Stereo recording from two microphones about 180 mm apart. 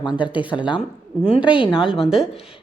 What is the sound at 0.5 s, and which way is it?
A woman's voice, 25° left (ahead or behind).